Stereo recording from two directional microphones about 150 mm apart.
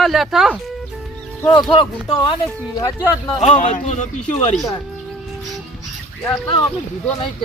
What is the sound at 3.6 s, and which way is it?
Speech, 55° left (ahead or behind).